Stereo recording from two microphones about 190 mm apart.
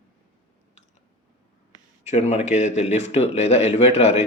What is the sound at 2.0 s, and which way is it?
Speech, 35° left (ahead or behind).